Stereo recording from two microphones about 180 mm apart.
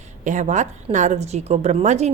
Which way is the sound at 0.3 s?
45° right (ahead or behind).